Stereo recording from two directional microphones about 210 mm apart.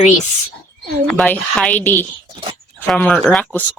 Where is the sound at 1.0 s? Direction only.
5° left (ahead or behind).